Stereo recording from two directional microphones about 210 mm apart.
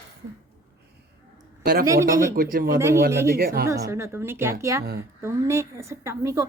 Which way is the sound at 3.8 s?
15° right (ahead or behind).